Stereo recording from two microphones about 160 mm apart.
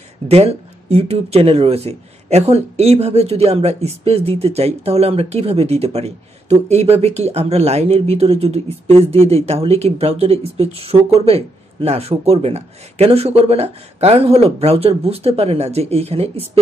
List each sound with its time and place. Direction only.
0.3 s speech: 40° right (ahead or behind)